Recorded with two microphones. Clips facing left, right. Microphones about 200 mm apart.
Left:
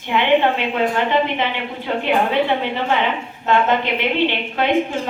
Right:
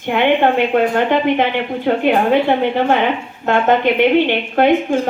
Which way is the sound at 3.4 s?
50° right (ahead or behind).